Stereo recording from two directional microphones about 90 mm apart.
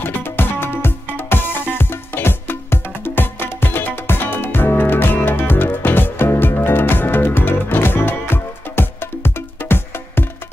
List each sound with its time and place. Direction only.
0.0 s music: 25° left (ahead or behind)